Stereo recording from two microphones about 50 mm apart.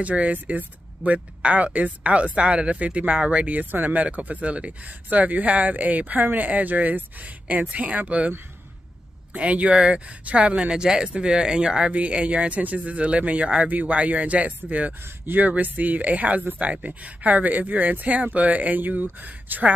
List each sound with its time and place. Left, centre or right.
0.0 s speech: right
9.3 s speech: right